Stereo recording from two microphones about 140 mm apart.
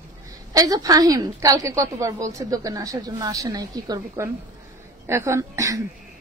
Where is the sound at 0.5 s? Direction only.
25° right (ahead or behind).